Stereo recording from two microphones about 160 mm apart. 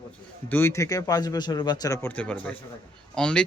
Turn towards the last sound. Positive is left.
turn(degrees=5)  # may be behind; listen again after turning